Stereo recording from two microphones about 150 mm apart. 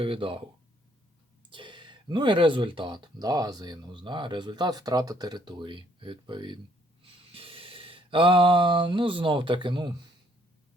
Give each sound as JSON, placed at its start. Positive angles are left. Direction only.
{"t": 0.0, "sound": "speech", "side_deg": -35}
{"t": 1.5, "sound": "speech", "side_deg": -30}
{"t": 7.0, "sound": "a sound", "side_deg": -40}